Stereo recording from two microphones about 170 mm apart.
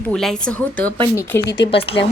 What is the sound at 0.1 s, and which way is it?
A woman's voice, 5° left (ahead or behind).